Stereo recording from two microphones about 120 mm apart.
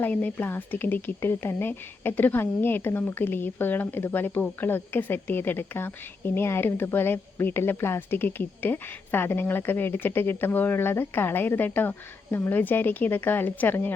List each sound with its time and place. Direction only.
0.0 s speech: 15° left (ahead or behind)